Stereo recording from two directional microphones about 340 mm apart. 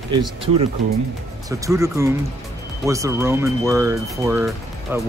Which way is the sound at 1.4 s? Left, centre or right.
Centre.